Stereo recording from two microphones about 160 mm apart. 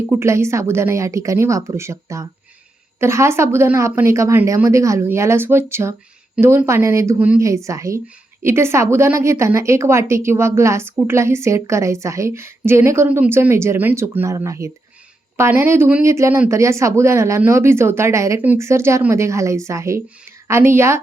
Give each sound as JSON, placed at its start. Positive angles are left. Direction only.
{"t": 0.1, "sound": "speech", "side_deg": -15}